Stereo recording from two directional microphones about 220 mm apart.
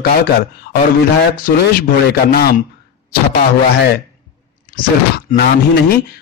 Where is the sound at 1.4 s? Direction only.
40° left (ahead or behind).